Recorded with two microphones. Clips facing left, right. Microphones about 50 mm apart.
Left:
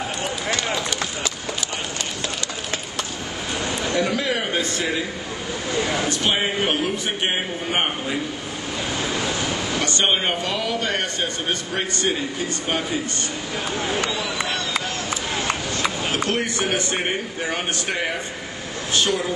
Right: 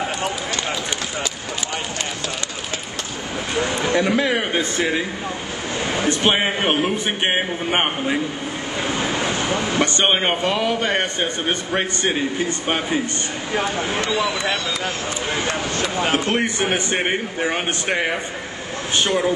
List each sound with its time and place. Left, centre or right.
3.5 s a sound: right
6.0 s a man's voice: right
16.0 s a man's voice: right